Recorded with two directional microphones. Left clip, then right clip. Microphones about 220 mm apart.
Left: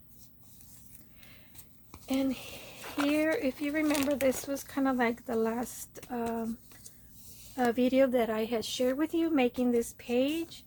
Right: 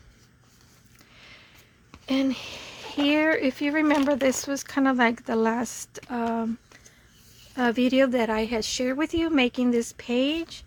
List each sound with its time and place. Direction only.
2.0 s speech: 40° right (ahead or behind)
7.5 s speech: 40° right (ahead or behind)